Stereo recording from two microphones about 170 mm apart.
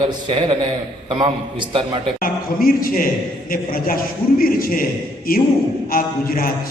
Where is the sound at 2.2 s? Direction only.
60° left (ahead or behind).